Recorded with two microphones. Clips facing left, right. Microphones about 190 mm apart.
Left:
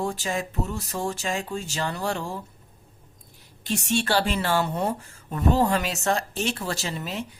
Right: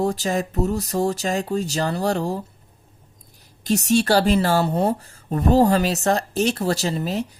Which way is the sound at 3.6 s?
40° right (ahead or behind).